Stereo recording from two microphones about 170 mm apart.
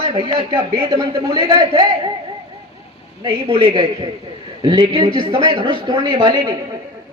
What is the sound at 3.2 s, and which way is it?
A man's voice, 30° right (ahead or behind).